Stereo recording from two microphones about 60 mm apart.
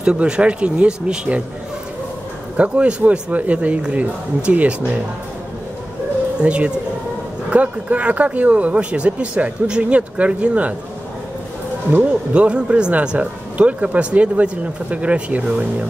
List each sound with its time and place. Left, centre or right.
0.0 s speech: centre
2.5 s speech: right
6.4 s speech: centre
11.9 s speech: right